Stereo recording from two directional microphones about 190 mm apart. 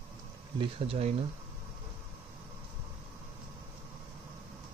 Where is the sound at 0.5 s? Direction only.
30° right (ahead or behind).